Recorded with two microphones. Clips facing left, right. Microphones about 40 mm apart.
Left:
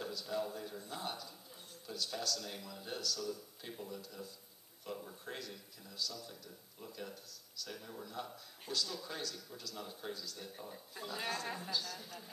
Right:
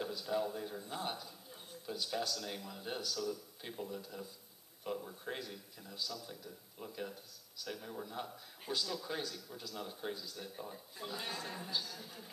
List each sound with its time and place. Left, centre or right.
0.0 s a man's voice: centre
10.5 s a man's voice: centre